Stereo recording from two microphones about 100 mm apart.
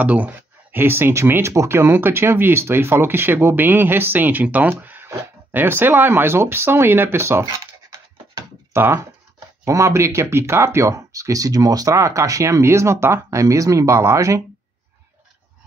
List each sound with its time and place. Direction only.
0.0 s speech: 15° right (ahead or behind)
8.7 s speech: 25° right (ahead or behind)